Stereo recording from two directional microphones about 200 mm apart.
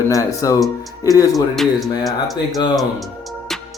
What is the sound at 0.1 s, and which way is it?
Speech, 15° left (ahead or behind).